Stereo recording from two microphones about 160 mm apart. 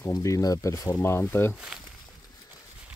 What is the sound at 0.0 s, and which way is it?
Speech, 20° left (ahead or behind).